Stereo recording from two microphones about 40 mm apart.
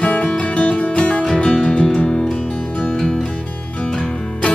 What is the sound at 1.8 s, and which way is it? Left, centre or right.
Music, centre.